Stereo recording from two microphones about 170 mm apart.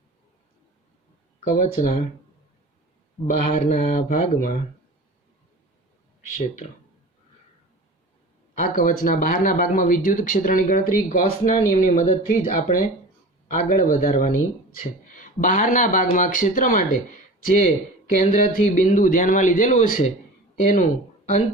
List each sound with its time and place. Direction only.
1.5 s speech: 50° left (ahead or behind)
3.2 s speech: 50° left (ahead or behind)
8.5 s speech: 55° left (ahead or behind)